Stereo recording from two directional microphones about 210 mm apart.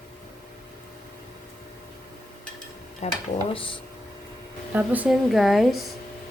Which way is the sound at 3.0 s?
30° left (ahead or behind).